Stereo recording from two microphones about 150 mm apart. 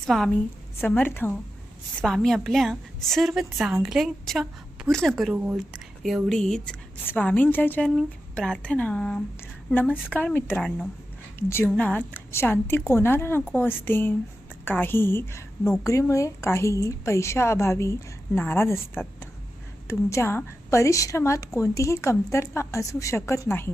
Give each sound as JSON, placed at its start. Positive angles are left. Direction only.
{"t": 0.0, "sound": "a woman's voice", "side_deg": 0}
{"t": 0.3, "sound": "a woman's voice", "side_deg": 10}
{"t": 2.0, "sound": "a woman's voice", "side_deg": 0}